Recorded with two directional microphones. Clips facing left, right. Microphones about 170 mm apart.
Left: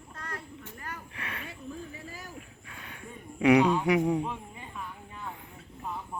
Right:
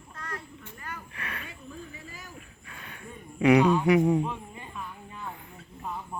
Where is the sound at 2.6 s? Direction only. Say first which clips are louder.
Even; 10° left (ahead or behind).